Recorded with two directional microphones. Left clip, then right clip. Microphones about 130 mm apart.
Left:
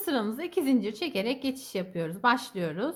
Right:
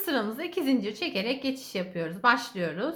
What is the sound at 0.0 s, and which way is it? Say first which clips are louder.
A woman's voice: right 1 dB; 50° left (ahead or behind).